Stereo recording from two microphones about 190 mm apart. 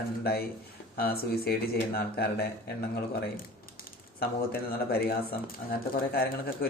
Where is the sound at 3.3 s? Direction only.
50° left (ahead or behind).